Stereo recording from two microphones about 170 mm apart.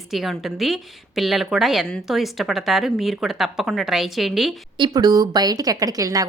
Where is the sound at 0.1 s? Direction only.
Centre (ahead or behind).